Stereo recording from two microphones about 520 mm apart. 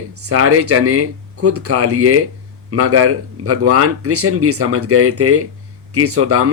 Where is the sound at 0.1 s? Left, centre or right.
Right.